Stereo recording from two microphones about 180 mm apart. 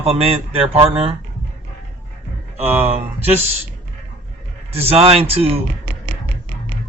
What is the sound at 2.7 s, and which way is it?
Speech, 10° right (ahead or behind).